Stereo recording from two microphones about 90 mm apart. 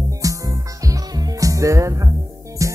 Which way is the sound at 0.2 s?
40° right (ahead or behind).